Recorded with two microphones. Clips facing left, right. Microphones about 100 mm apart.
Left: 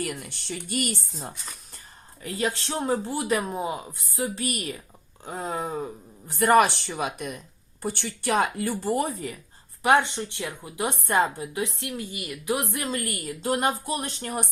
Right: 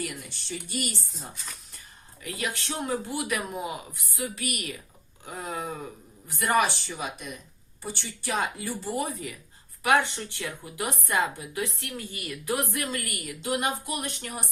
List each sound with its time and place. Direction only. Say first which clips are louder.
0.0 s speech: left 4 dB; 60° left (ahead or behind)
2.2 s speech: left 5 dB; 30° left (ahead or behind)
6.6 s speech: left 5 dB; 60° left (ahead or behind)
9.8 s a woman's voice: left 3 dB; 25° left (ahead or behind)
11.6 s a woman's voice: left 2 dB; 20° left (ahead or behind)